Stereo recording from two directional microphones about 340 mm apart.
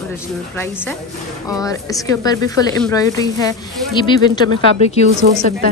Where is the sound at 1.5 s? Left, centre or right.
Centre.